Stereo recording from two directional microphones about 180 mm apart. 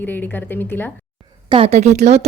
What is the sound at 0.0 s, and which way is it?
Speech, 10° left (ahead or behind).